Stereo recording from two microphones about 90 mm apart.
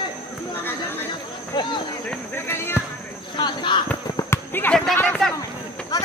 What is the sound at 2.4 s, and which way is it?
Basketball bounce, 25° left (ahead or behind).